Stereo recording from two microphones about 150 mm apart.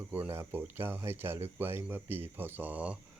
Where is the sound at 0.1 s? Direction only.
15° right (ahead or behind).